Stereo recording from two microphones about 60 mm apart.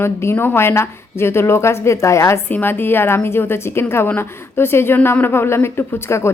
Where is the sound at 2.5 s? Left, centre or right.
Left.